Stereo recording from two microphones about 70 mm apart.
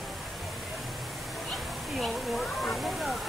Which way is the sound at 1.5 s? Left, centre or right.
Centre.